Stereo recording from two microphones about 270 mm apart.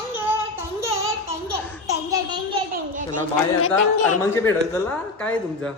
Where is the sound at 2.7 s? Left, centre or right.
Right.